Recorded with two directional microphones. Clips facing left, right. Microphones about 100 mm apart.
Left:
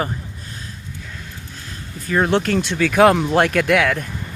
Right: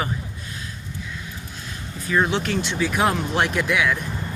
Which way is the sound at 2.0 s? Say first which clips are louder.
Left 4 dB; 45° left (ahead or behind).